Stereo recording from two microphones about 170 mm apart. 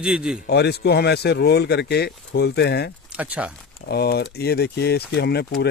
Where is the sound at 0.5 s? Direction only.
75° left (ahead or behind).